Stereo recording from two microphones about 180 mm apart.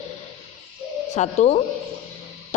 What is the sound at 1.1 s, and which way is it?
Speech, 40° left (ahead or behind).